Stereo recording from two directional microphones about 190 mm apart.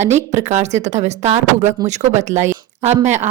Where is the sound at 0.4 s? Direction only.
35° right (ahead or behind).